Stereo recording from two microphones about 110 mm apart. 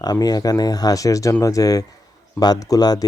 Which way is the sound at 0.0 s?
35° left (ahead or behind).